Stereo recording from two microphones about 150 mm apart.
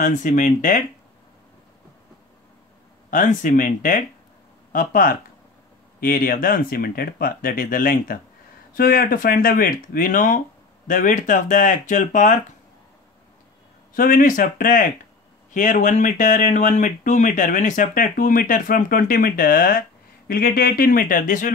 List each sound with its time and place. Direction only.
0.0 s speech: 55° left (ahead or behind)
3.1 s speech: 60° left (ahead or behind)
5.9 s speech: 75° left (ahead or behind); by 12.4 s 60° left (ahead or behind)
13.9 s speech: 70° left (ahead or behind)